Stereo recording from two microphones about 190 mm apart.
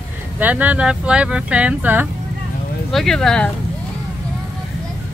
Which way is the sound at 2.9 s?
Centre (ahead or behind).